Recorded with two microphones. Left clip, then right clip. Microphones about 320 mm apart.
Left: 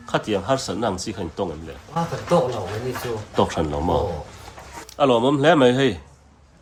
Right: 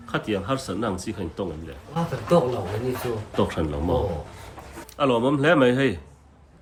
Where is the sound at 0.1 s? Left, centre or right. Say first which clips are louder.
Left 5 dB; centre.